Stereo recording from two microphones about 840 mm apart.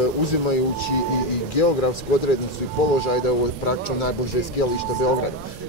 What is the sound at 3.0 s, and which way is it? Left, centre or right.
Speech, left.